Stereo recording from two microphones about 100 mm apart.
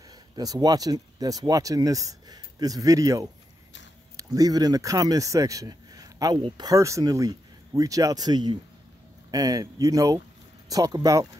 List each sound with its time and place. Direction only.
0.4 s speech: 40° right (ahead or behind)